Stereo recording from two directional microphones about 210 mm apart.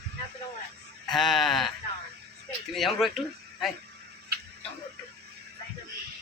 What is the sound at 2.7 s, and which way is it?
Speech, centre (ahead or behind).